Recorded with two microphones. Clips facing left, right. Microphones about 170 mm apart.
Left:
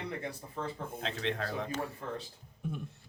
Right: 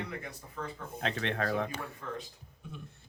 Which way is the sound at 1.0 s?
60° right (ahead or behind).